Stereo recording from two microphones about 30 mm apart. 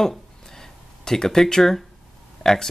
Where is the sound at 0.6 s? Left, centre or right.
Centre.